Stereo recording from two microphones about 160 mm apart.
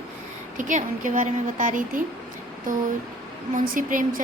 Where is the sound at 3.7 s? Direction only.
55° right (ahead or behind).